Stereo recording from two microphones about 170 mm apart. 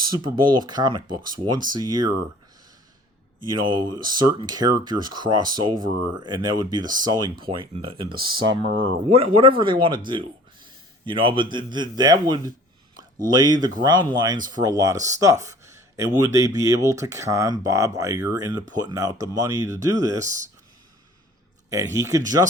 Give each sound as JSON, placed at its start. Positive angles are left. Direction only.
{"t": 0.2, "sound": "speech", "side_deg": -25}
{"t": 3.7, "sound": "speech", "side_deg": -25}
{"t": 10.1, "sound": "a sound", "side_deg": -30}
{"t": 11.5, "sound": "speech", "side_deg": -25}
{"t": 13.2, "sound": "speech", "side_deg": -25}
{"t": 21.7, "sound": "speech", "side_deg": -20}